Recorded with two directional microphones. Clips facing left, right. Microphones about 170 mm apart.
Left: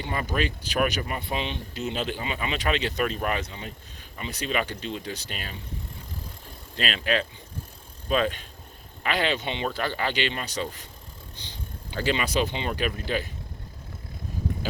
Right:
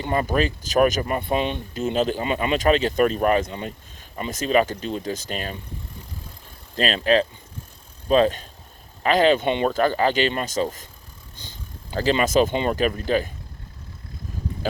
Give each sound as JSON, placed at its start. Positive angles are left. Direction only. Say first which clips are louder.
{"t": 0.0, "sound": "speech", "louder": "right 6 dB", "side_deg": -45}
{"t": 6.7, "sound": "speech", "louder": "right 7 dB", "side_deg": -40}